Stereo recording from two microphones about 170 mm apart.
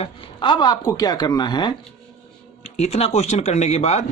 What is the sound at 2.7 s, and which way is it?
Speech, 40° left (ahead or behind).